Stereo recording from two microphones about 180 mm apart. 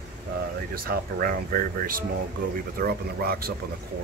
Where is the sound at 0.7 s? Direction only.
55° right (ahead or behind).